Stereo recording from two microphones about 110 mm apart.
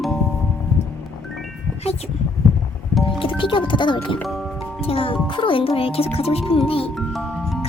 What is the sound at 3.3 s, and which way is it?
Speech, 50° left (ahead or behind).